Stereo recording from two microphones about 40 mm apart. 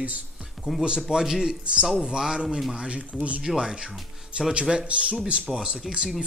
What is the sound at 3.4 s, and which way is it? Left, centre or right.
Speech, centre.